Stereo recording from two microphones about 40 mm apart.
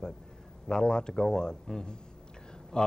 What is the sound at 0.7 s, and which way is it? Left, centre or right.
Speech, centre.